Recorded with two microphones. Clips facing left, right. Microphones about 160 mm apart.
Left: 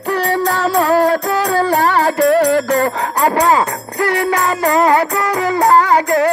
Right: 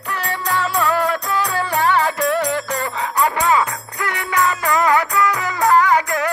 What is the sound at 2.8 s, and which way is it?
Jingle bell, 40° left (ahead or behind).